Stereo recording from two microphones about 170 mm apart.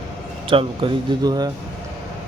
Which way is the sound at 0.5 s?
25° right (ahead or behind).